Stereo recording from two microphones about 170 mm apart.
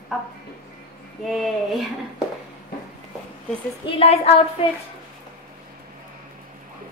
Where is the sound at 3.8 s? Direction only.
35° left (ahead or behind).